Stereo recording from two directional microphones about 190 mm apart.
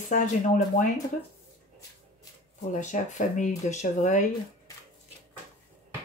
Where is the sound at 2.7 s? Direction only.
40° left (ahead or behind).